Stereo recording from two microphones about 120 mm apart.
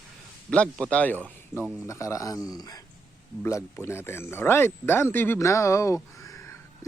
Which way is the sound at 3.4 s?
20° left (ahead or behind).